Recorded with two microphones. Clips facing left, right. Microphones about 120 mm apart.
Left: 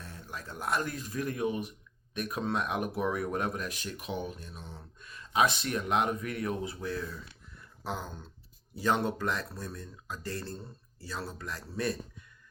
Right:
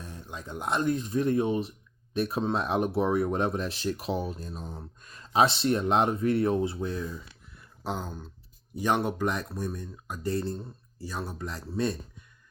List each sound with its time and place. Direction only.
0.0 s speech: 15° right (ahead or behind)